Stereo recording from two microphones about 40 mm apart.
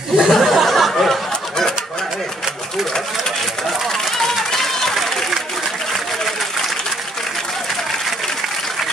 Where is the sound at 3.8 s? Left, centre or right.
Centre.